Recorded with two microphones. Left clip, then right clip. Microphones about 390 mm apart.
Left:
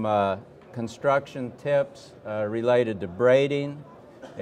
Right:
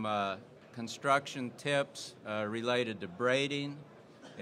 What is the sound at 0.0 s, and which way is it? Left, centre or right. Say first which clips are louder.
Speech: left 10 dB; left.